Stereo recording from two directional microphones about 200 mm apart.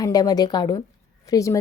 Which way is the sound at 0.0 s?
20° left (ahead or behind).